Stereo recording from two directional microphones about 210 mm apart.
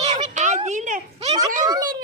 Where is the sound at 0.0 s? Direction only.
30° right (ahead or behind).